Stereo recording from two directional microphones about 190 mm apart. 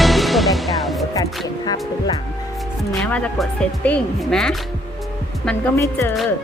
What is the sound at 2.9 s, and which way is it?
Speech, 5° left (ahead or behind).